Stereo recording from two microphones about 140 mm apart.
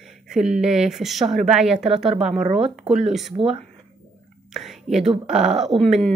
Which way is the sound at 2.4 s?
50° right (ahead or behind).